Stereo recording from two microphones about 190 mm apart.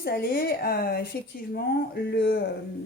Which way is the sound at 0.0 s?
55° left (ahead or behind).